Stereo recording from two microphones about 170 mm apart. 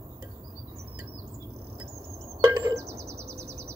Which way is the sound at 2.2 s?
20° right (ahead or behind).